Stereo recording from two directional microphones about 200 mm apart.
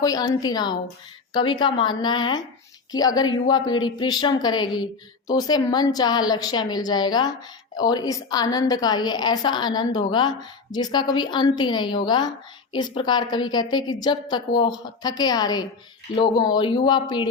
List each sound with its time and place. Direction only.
0.0 s a woman's voice: 20° left (ahead or behind)